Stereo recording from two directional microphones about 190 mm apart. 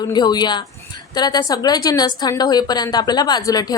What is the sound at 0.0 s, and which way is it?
A woman's voice, 20° left (ahead or behind).